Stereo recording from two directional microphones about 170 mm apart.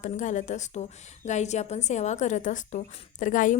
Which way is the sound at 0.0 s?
45° left (ahead or behind).